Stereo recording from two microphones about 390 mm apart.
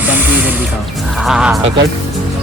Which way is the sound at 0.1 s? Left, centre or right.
Centre.